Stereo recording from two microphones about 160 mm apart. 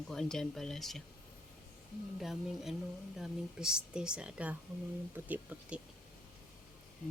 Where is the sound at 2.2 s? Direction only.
Centre (ahead or behind).